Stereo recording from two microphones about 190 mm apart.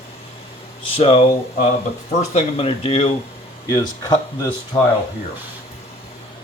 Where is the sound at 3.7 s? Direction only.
20° left (ahead or behind).